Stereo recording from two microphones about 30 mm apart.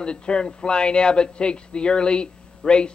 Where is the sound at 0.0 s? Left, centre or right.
Left.